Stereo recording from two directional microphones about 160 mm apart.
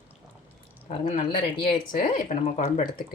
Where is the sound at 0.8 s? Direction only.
45° left (ahead or behind).